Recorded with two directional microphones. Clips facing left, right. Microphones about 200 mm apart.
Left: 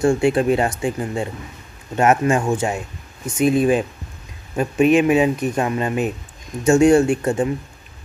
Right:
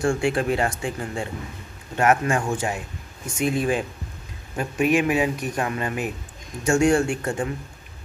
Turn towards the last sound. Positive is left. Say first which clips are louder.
# left 7 dB
turn(degrees=20)  # may be behind; listen again after turning